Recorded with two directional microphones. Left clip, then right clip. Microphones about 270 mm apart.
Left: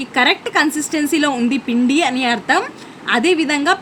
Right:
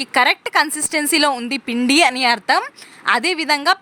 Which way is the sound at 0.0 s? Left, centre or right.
Right.